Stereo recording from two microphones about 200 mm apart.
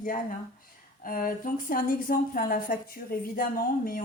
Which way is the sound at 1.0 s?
45° left (ahead or behind).